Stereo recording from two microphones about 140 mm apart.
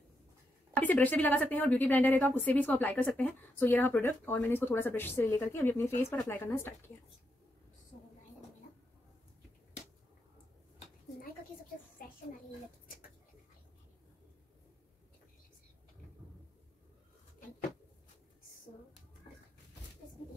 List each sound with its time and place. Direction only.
0.7 s a woman's voice: 10° left (ahead or behind)